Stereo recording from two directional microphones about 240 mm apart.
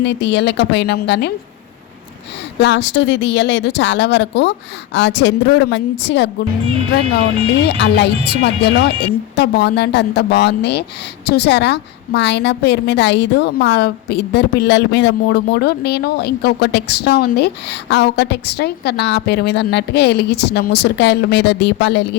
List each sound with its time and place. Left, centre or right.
0.0 s a woman's voice: left
2.6 s a woman's voice: left
7.6 s a woman's voice: left